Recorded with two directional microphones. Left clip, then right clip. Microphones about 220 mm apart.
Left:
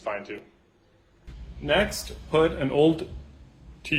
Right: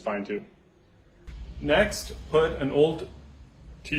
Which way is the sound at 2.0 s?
40° left (ahead or behind).